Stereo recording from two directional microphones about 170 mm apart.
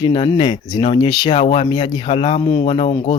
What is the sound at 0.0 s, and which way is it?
Speech, 35° left (ahead or behind).